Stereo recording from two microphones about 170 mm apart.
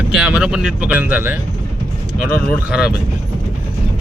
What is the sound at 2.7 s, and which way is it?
Speech, 5° right (ahead or behind).